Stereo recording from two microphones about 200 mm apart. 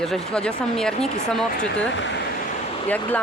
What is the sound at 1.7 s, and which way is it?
Speech, 65° left (ahead or behind).